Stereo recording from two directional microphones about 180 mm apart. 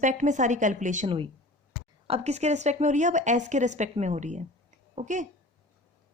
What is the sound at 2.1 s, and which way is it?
Speech, 40° right (ahead or behind).